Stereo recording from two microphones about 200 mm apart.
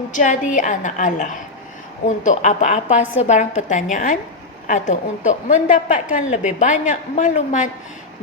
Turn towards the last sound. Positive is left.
turn(degrees=35)  # may be behind; listen again after turning